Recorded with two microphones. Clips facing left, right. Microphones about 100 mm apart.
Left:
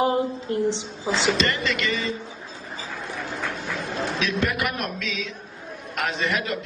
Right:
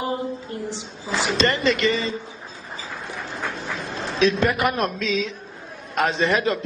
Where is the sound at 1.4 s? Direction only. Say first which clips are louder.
Right 5 dB; 30° right (ahead or behind).